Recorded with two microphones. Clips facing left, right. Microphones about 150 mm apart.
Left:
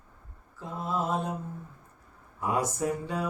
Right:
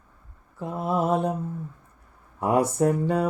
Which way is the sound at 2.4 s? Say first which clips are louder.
Right 7 dB; 60° right (ahead or behind).